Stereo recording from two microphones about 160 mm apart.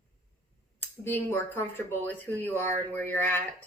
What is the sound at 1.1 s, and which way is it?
Speech, 15° left (ahead or behind).